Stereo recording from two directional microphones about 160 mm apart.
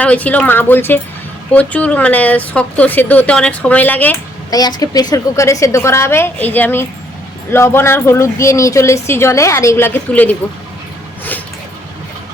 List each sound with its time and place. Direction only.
0.0 s speech: 10° left (ahead or behind)
4.5 s speech: 25° left (ahead or behind)